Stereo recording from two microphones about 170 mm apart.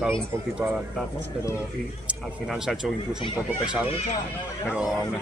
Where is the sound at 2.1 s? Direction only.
5° right (ahead or behind).